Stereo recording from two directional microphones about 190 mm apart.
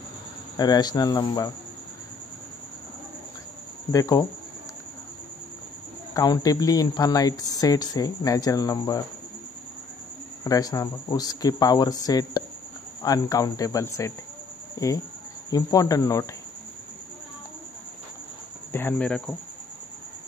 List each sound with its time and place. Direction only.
0.6 s speech: 20° left (ahead or behind)
3.9 s speech: 20° left (ahead or behind)
6.1 s speech: 20° left (ahead or behind)
10.4 s speech: 20° left (ahead or behind)
18.7 s speech: 10° left (ahead or behind)